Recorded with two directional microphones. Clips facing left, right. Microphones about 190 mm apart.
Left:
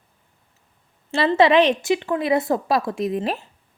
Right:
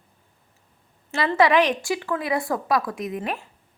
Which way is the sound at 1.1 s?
30° left (ahead or behind).